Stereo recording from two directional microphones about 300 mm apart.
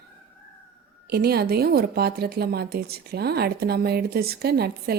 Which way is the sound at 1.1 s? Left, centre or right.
Right.